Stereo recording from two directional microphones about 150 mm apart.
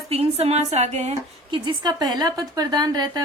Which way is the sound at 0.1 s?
40° right (ahead or behind).